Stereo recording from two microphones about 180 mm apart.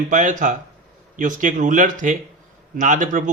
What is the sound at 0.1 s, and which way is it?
Speech, 45° right (ahead or behind).